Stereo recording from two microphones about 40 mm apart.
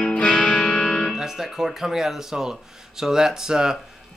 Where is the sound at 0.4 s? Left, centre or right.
Left.